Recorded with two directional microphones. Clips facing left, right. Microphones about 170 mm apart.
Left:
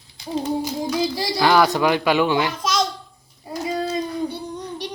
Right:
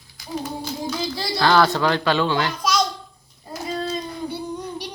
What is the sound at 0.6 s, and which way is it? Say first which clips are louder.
Speech: left 4 dB; 10° left (ahead or behind).